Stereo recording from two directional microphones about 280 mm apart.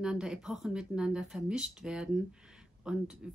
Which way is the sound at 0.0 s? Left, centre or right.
Centre.